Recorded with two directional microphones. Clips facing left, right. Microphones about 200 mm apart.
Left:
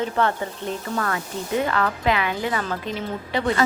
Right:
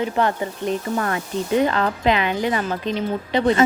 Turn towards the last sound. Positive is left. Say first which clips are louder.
# right 5 dB
turn(degrees=-20)  # may be behind; listen again after turning